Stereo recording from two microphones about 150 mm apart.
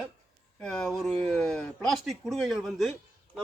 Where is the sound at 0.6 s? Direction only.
5° left (ahead or behind).